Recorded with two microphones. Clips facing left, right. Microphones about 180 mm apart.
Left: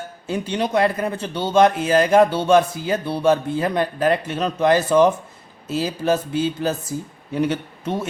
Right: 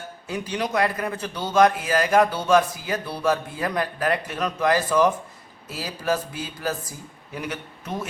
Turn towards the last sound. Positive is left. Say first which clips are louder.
# left 8 dB
turn(degrees=30)  # may be behind; listen again after turning